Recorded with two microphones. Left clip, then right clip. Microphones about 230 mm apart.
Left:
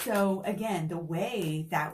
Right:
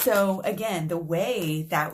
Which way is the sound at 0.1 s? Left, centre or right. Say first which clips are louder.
Right 6 dB; right.